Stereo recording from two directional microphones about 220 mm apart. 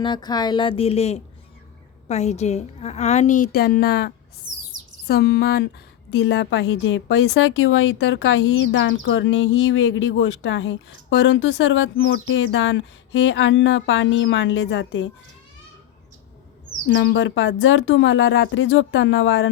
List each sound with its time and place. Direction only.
0.0 s a woman's voice: 20° left (ahead or behind); by 4.1 s 45° left (ahead or behind)
4.4 s chirp: 60° right (ahead or behind)
5.0 s a sound: 45° left (ahead or behind)
6.1 s a woman's voice: 50° left (ahead or behind)
16.9 s a woman's voice: 55° left (ahead or behind)